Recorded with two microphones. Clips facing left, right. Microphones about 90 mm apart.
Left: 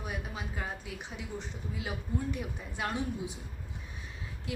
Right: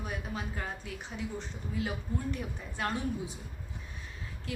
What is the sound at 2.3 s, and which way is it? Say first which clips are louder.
A woman's voice: even; 10° left (ahead or behind).